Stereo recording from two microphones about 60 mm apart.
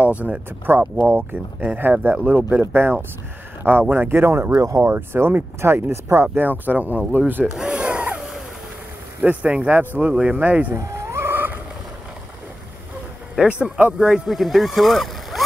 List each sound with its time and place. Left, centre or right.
0.0 s speech: right
0.7 s speech: right
4.6 s speech: right
4.8 s speech: right
6.3 s speech: right
7.5 s rub: centre
9.2 s speech: right
10.7 s wild animals: right
13.5 s speech: right
14.2 s speech: centre